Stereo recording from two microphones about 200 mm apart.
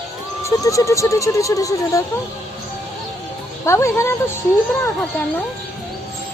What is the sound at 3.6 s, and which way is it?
Speech, 15° left (ahead or behind).